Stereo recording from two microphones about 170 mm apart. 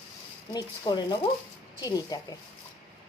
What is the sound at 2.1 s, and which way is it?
Speech, 25° left (ahead or behind).